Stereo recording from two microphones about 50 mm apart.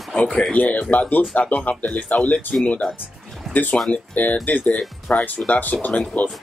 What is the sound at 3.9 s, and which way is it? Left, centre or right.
Speech, left.